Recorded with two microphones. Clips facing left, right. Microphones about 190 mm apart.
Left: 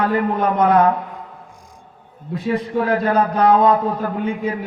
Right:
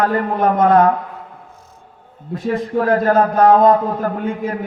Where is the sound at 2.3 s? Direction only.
45° right (ahead or behind).